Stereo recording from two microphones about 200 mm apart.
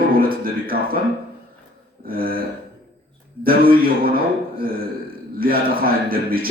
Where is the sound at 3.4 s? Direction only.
50° right (ahead or behind).